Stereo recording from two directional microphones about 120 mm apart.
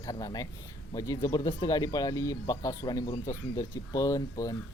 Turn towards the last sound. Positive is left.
turn(degrees=30)  # may be behind; listen again after turning